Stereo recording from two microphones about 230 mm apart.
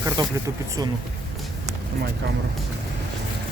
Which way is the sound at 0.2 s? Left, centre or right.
Centre.